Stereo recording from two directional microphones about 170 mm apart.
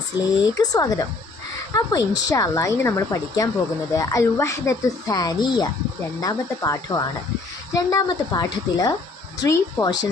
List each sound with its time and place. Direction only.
0.6 s speech: 20° left (ahead or behind)